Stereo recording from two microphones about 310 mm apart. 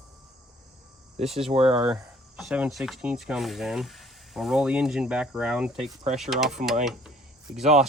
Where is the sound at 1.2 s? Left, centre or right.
Centre.